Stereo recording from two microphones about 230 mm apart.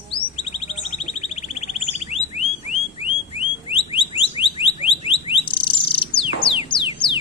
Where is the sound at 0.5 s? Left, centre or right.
Left.